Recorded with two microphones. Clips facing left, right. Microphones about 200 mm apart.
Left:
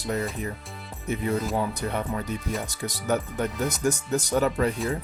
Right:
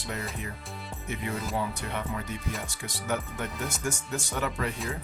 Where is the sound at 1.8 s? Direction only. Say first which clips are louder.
Left 5 dB; 40° left (ahead or behind).